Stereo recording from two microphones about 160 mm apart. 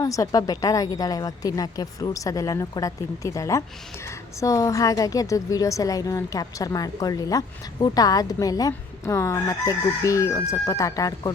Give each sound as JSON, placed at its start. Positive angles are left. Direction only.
{"t": 0.0, "sound": "a woman's voice", "side_deg": 20}